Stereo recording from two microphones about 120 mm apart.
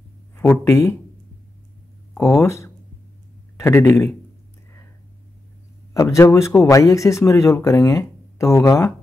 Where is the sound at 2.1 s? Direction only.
25° left (ahead or behind).